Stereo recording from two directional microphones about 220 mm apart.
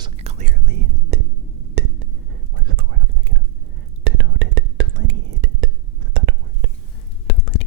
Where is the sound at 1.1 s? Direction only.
50° right (ahead or behind).